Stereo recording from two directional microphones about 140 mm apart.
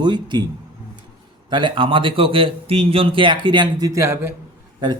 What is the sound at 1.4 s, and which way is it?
Speech, 35° right (ahead or behind).